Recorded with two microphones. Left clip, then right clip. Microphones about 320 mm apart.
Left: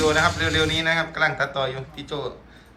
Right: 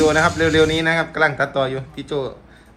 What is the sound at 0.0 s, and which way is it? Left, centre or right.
Speech, centre.